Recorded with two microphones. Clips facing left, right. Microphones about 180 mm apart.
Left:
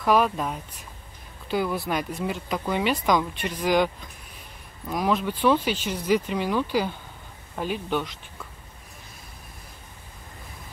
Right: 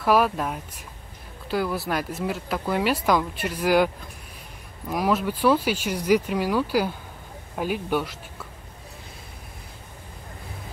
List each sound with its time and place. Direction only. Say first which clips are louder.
0.0 s speech: right 1 dB; 5° right (ahead or behind)